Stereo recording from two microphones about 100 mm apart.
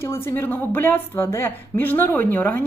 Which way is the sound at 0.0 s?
25° left (ahead or behind).